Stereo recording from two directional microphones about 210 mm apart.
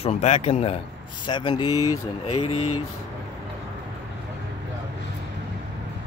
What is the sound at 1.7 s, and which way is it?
Speech, 90° left.